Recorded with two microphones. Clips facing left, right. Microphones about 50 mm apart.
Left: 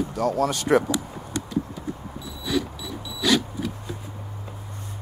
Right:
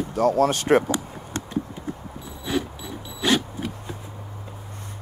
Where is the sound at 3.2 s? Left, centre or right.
Right.